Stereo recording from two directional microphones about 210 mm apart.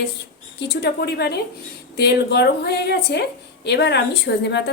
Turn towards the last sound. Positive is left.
turn(degrees=55)  # may be behind; listen again after turning